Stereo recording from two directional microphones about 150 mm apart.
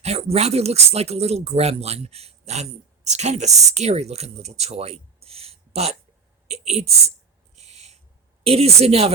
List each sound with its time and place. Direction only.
0.0 s a woman's voice: 45° right (ahead or behind)
7.5 s owl: 45° right (ahead or behind)
8.4 s speech: 45° right (ahead or behind)